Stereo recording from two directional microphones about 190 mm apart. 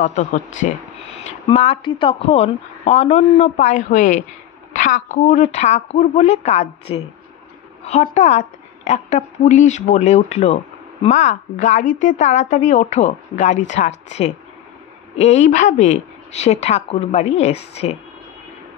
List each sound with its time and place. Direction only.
0.0 s a woman's voice: 40° left (ahead or behind)
8.0 s a woman's voice: 35° left (ahead or behind)